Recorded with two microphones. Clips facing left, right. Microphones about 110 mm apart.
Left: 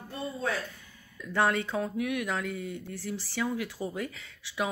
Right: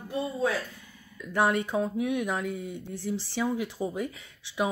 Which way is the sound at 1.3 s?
15° right (ahead or behind).